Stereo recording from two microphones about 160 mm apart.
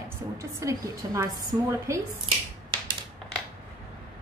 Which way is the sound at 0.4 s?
20° right (ahead or behind).